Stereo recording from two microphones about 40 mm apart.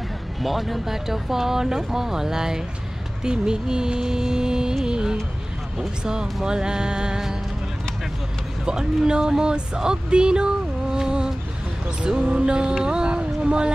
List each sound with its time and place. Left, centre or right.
0.4 s speech: centre
4.8 s music: centre
5.8 s speech: centre
8.6 s speech: centre
12.8 s a sound: right